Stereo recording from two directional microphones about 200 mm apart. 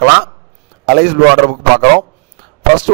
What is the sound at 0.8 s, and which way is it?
Speech, 50° right (ahead or behind).